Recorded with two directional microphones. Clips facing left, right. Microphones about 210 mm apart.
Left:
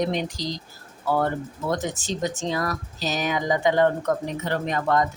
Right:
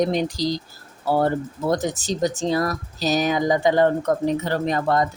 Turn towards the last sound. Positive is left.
turn(degrees=-35)  # may be behind; listen again after turning